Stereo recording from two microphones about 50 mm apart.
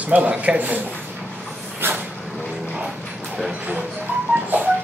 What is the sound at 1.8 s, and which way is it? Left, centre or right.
Vehicle, right.